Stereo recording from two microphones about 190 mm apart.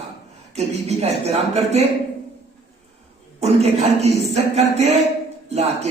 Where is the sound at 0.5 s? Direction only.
35° right (ahead or behind).